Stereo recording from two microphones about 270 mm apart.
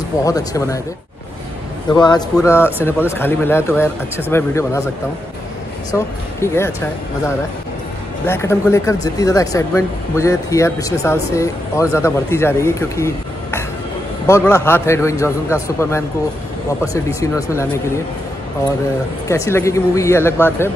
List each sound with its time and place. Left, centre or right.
0.2 s speech: centre
1.9 s speech: centre
5.9 s speech: centre
8.3 s speech: centre
19.2 s speech: centre